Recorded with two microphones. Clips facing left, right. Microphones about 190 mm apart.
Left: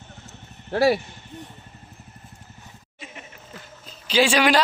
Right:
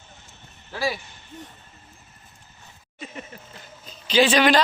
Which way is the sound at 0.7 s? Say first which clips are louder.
Left 9 dB; 60° left (ahead or behind).